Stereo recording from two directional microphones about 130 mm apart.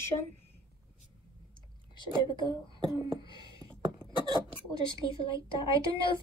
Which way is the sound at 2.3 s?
40° left (ahead or behind).